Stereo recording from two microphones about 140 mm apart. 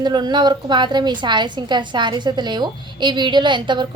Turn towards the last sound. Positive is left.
turn(degrees=-35)  # may be behind; listen again after turning